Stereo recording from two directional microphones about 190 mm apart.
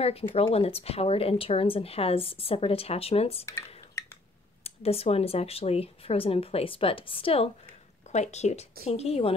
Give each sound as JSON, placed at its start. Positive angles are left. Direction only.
{"t": 0.0, "sound": "speech", "side_deg": 30}
{"t": 4.6, "sound": "speech", "side_deg": 30}